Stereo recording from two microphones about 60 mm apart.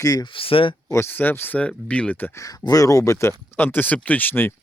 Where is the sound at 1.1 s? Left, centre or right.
Left.